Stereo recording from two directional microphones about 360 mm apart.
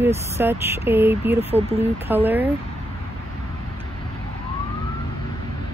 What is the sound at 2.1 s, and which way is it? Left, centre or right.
Speech, centre.